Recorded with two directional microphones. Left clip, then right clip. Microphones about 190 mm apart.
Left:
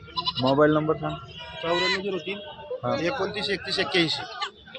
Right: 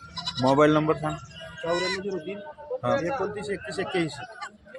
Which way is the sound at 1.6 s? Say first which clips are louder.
Left 3 dB; 10° left (ahead or behind).